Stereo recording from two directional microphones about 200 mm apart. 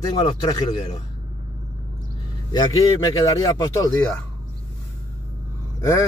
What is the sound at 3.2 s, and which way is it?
Speech, 15° left (ahead or behind).